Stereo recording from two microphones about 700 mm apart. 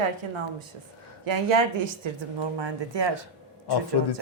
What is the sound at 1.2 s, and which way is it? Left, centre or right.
Speech, right.